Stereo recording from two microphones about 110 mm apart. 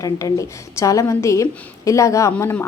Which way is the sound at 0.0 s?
30° left (ahead or behind).